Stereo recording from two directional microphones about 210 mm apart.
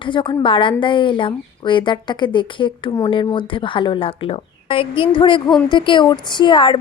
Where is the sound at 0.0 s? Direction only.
20° left (ahead or behind).